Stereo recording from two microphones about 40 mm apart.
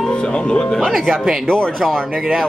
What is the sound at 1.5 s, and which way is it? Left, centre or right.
Speech, centre.